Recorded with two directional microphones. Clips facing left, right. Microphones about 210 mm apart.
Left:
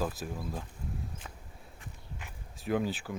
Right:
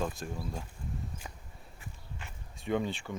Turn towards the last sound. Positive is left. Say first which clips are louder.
# left 1 dB
turn(degrees=5)  # may be behind; listen again after turning